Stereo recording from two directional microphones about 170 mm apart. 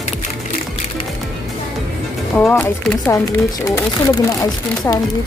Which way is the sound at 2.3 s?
5° left (ahead or behind).